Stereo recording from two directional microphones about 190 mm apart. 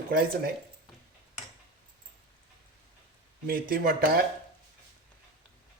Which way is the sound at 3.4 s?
50° right (ahead or behind).